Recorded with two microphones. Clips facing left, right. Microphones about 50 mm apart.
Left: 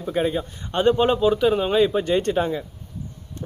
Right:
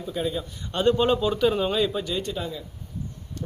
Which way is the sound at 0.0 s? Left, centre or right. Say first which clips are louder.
Left 5 dB; left.